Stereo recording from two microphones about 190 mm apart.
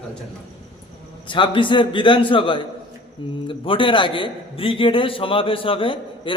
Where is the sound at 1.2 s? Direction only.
25° left (ahead or behind).